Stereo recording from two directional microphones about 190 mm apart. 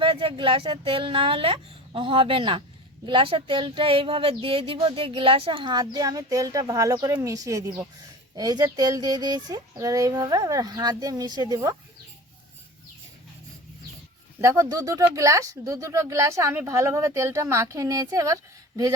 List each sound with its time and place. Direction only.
0.0 s speech: 30° right (ahead or behind)
14.4 s speech: 15° right (ahead or behind)